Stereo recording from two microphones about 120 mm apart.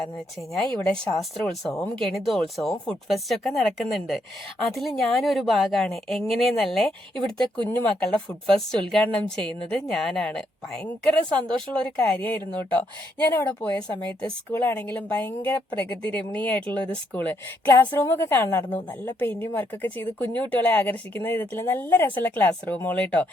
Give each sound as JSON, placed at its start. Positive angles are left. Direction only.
{"t": 0.5, "sound": "speech", "side_deg": 5}
{"t": 13.5, "sound": "speech", "side_deg": 10}